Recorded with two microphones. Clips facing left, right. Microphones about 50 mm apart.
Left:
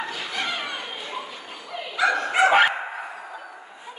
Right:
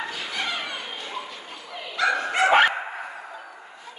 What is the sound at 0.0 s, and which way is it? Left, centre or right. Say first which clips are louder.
Dog: left 1 dB; centre.